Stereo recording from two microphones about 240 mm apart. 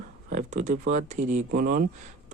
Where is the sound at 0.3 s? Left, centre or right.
Right.